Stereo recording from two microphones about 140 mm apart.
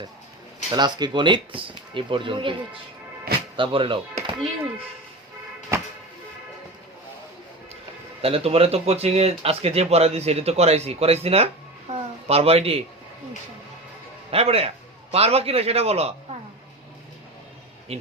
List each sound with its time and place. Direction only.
0.7 s speech: 30° right (ahead or behind)
3.3 s music: 90° right
3.6 s speech: 35° right (ahead or behind)
8.2 s speech: 45° right (ahead or behind)
11.9 s a sound: 50° right (ahead or behind)
12.3 s speech: 45° right (ahead or behind)
14.3 s speech: 45° right (ahead or behind)
17.9 s speech: 45° right (ahead or behind)